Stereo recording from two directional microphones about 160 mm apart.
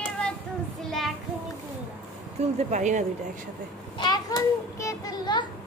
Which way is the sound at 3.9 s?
25° left (ahead or behind).